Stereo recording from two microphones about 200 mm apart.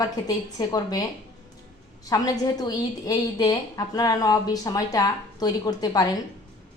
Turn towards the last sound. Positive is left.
turn(degrees=20)  # may be behind; listen again after turning